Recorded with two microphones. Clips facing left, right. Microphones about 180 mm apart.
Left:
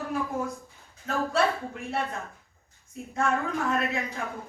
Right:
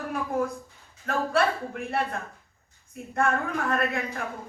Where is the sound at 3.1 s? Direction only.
55° right (ahead or behind).